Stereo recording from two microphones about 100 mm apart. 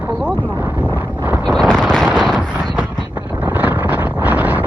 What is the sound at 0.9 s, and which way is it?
Wind noise, 20° right (ahead or behind).